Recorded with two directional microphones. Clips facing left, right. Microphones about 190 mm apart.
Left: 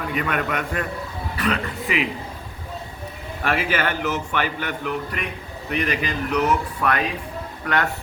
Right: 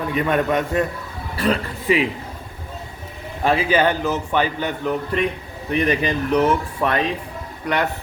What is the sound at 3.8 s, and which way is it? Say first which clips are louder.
Speech: right 5 dB; 15° right (ahead or behind).